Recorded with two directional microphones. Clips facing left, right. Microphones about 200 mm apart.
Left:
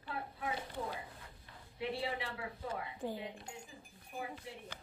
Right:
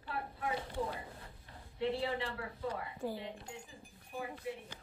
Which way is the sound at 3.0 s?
20° left (ahead or behind).